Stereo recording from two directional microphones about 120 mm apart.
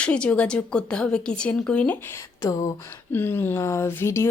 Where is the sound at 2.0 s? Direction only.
25° left (ahead or behind).